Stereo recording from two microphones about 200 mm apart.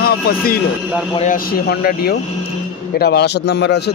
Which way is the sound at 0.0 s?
50° left (ahead or behind).